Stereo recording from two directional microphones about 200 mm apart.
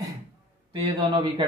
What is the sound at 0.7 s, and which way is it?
Speech, 25° right (ahead or behind).